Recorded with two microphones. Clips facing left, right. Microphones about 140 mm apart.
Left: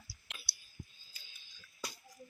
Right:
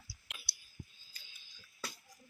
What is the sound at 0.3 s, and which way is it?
Clicking, 5° right (ahead or behind).